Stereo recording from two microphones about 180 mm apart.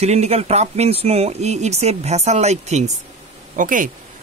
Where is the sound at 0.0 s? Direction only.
35° right (ahead or behind).